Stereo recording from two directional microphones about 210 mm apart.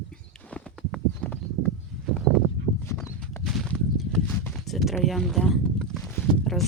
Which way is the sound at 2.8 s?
10° left (ahead or behind).